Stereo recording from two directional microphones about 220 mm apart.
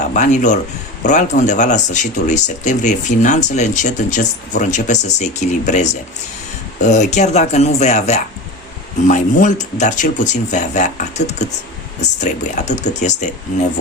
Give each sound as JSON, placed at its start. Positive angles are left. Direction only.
{"t": 0.1, "sound": "speech", "side_deg": 35}